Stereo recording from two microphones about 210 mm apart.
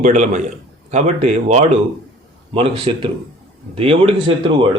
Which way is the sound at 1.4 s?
30° right (ahead or behind).